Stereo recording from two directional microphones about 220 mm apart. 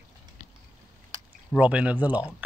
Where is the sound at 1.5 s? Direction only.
5° right (ahead or behind).